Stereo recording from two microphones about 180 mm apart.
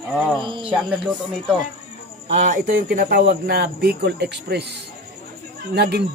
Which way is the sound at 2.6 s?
50° right (ahead or behind).